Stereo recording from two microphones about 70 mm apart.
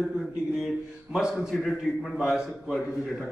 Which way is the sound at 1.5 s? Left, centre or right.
Centre.